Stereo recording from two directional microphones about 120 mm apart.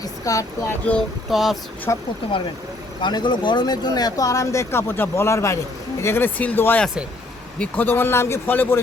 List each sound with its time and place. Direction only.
0.0 s speech: 30° left (ahead or behind)
1.3 s speech: centre (ahead or behind)
1.9 s speech: 25° left (ahead or behind)
3.0 s speech: 40° left (ahead or behind); by 8.8 s 20° left (ahead or behind)